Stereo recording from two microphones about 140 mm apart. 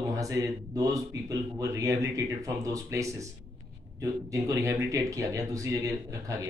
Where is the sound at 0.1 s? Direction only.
25° right (ahead or behind).